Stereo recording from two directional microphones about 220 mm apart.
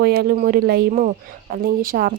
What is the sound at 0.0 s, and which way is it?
A woman's voice, 45° right (ahead or behind).